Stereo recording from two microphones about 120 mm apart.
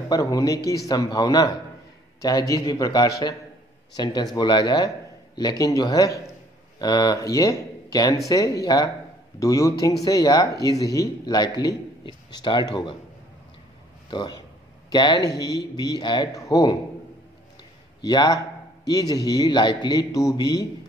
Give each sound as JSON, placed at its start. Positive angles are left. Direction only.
{"t": 0.1, "sound": "a man's voice", "side_deg": 30}
{"t": 14.1, "sound": "a man's voice", "side_deg": 35}
{"t": 18.0, "sound": "a man's voice", "side_deg": 30}